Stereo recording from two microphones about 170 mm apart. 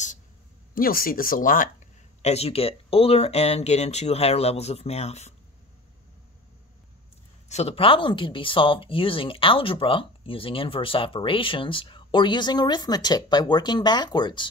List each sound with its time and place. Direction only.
0.7 s speech: 55° left (ahead or behind)
2.2 s speech: 35° left (ahead or behind)
7.4 s speech: 40° left (ahead or behind)